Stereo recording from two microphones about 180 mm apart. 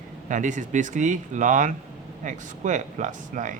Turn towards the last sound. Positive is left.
turn(degrees=-45)  # may be behind; listen again after turning